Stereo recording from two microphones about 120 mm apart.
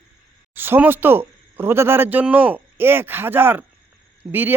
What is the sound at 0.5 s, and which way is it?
Speech, 15° right (ahead or behind).